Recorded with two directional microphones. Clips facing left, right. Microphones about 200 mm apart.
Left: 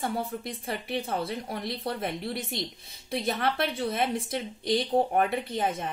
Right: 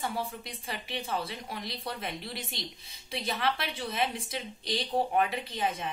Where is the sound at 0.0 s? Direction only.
55° left (ahead or behind).